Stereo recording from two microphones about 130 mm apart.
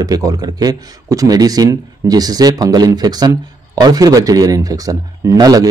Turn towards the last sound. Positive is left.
turn(degrees=-30)  # may be behind; listen again after turning